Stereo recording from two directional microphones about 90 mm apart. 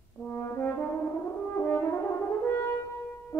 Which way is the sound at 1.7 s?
30° left (ahead or behind).